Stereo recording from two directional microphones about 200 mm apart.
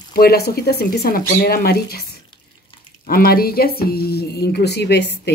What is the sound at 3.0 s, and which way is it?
Speech, 45° left (ahead or behind).